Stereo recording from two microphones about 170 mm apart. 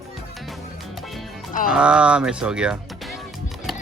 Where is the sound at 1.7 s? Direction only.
5° right (ahead or behind).